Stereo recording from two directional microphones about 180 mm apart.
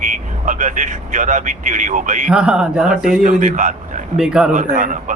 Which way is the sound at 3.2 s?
45° right (ahead or behind).